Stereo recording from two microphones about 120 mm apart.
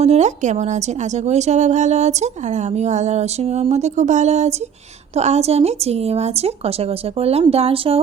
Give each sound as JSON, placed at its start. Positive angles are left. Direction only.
{"t": 0.0, "sound": "a woman's voice", "side_deg": -70}